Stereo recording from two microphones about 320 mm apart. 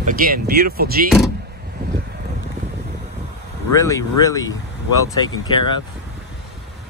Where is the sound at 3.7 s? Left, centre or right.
Centre.